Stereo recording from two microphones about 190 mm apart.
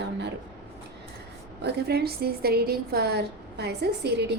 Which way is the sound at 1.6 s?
60° right (ahead or behind).